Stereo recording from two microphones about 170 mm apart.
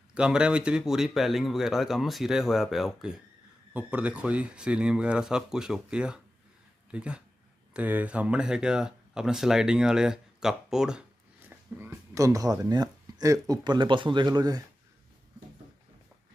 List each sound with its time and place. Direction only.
0.1 s speech: 5° right (ahead or behind)
11.4 s speech: 15° right (ahead or behind)